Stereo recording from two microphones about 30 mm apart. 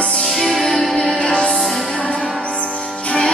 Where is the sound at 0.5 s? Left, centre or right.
Centre.